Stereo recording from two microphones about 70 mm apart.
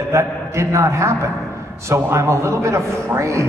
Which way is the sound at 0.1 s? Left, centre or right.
Right.